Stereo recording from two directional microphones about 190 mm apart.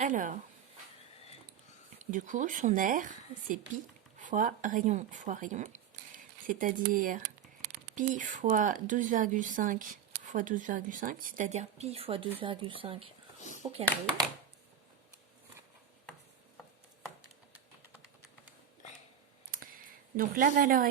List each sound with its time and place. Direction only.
0.0 s speech: 45° right (ahead or behind)
2.0 s speech: 40° right (ahead or behind)
19.5 s a sound: 50° right (ahead or behind)